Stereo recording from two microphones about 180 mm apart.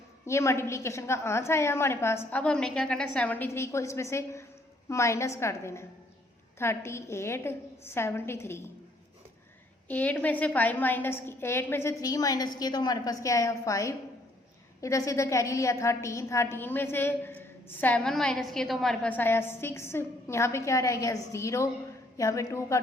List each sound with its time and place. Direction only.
0.3 s a woman's voice: 15° left (ahead or behind)
9.9 s a woman's voice: 10° left (ahead or behind)